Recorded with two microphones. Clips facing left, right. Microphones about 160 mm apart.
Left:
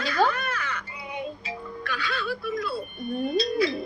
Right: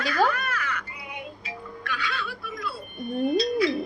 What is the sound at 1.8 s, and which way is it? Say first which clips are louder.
Music: left 2 dB; 35° left (ahead or behind).